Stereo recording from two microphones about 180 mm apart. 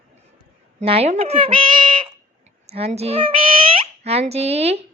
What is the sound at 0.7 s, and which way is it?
Speech, 35° right (ahead or behind).